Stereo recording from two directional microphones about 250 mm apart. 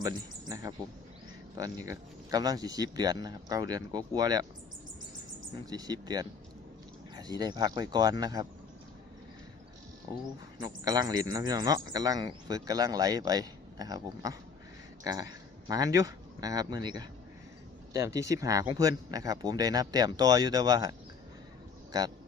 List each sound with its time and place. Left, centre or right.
0.0 s speech: centre
5.7 s speech: centre
10.8 s speech: centre